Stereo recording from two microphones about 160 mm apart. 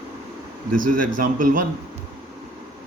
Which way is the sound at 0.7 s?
60° right (ahead or behind).